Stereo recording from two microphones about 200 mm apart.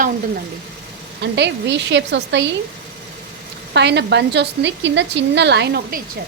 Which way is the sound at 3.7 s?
60° right (ahead or behind).